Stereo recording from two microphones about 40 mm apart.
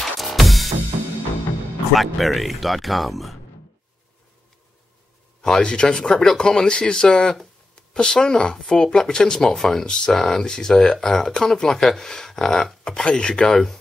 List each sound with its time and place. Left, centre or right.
0.0 s music: centre
2.0 s speech: centre
5.4 s speech: centre